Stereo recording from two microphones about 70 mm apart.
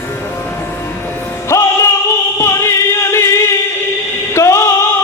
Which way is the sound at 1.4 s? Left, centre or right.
Left.